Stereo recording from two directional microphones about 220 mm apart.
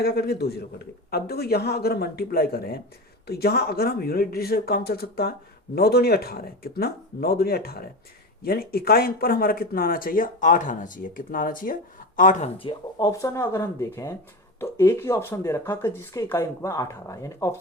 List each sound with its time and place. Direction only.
0.0 s speech: 45° left (ahead or behind); by 17.5 s 15° left (ahead or behind)